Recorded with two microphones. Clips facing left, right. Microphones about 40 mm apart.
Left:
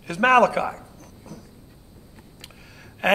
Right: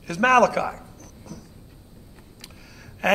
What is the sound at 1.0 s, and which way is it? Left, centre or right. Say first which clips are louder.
Dog: even; left.